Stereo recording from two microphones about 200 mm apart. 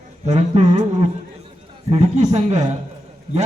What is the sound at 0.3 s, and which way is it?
A man's voice, 35° right (ahead or behind).